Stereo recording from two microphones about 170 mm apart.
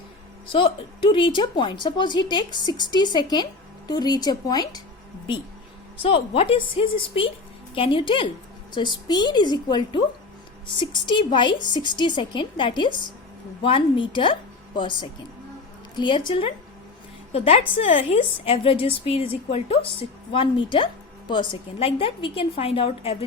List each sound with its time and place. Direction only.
0.4 s a woman's voice: 30° left (ahead or behind)
6.0 s a woman's voice: 35° left (ahead or behind)